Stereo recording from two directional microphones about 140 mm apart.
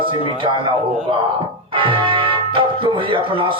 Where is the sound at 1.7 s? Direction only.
35° right (ahead or behind).